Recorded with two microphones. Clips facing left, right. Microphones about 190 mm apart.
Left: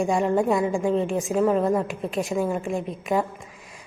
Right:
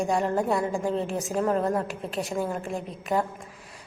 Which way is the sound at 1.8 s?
35° right (ahead or behind).